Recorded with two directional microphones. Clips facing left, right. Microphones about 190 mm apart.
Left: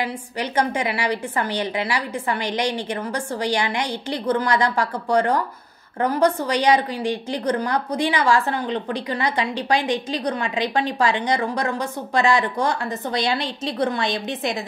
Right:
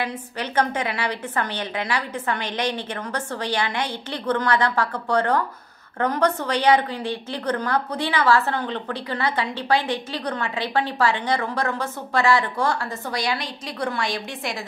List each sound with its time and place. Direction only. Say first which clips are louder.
0.0 s a woman's voice: left 2 dB; 10° left (ahead or behind)